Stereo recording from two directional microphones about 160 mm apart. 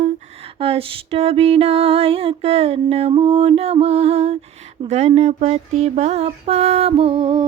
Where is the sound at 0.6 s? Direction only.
35° right (ahead or behind).